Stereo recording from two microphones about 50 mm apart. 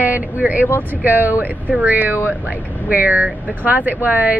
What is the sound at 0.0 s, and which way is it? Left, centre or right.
Speech, right.